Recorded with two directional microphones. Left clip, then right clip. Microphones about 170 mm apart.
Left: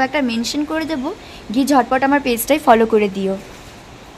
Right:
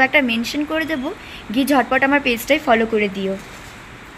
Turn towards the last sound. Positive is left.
turn(degrees=15)  # may be behind; listen again after turning